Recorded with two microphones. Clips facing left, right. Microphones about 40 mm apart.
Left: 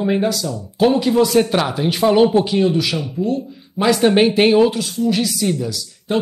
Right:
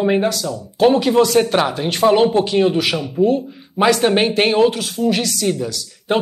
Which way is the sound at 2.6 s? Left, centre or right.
Right.